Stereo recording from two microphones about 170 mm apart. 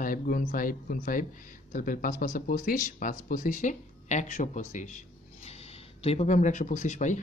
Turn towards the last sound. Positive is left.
turn(degrees=45)  # may be behind; listen again after turning